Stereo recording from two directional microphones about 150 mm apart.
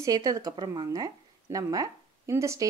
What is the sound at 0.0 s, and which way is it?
Speech, 25° right (ahead or behind).